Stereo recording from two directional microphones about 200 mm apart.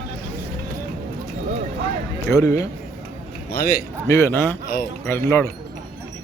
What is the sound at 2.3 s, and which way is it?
Speech, 15° left (ahead or behind).